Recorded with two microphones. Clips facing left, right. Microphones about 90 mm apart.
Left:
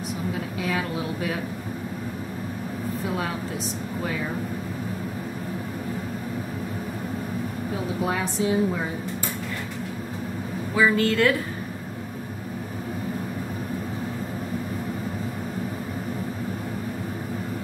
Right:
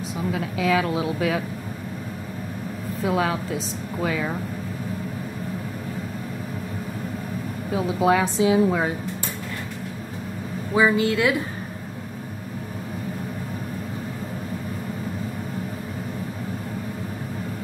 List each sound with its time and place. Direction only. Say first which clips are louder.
8.0 s a woman's voice: right 7 dB; 90° right
10.7 s a woman's voice: right 2 dB; 20° right (ahead or behind)